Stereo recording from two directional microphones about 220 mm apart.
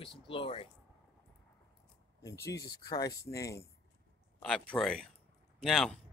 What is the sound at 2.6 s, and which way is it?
Speech, 15° left (ahead or behind).